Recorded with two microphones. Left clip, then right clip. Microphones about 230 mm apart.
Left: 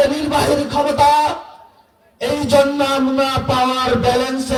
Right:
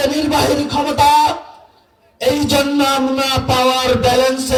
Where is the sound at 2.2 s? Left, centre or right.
Right.